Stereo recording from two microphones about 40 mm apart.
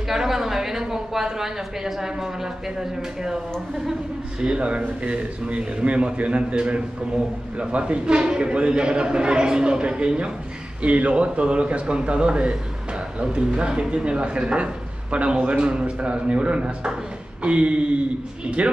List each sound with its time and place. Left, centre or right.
0.1 s a woman's voice: centre
4.6 s a man's voice: right